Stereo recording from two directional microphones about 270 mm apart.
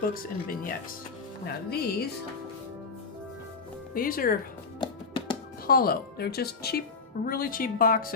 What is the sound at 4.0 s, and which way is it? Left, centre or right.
Speech, left.